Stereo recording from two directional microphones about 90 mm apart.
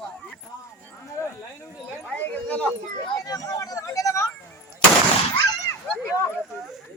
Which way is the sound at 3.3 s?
45° left (ahead or behind).